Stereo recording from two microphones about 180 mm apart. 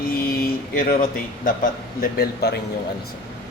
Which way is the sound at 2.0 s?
60° left (ahead or behind).